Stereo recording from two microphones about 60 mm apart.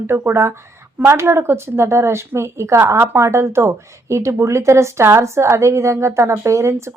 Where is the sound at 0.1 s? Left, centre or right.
Right.